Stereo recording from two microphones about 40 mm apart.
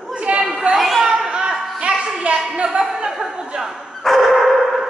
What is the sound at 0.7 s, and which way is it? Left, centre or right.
Chatter, centre.